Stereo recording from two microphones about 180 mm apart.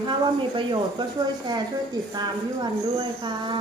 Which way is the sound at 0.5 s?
25° right (ahead or behind).